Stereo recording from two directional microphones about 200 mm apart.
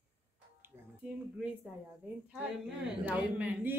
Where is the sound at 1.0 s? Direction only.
5° right (ahead or behind).